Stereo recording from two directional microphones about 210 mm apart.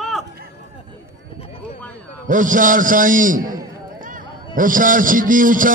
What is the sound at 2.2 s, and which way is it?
A man's voice, 40° right (ahead or behind).